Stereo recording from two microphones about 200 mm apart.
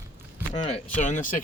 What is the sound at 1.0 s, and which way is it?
Speech, 40° left (ahead or behind).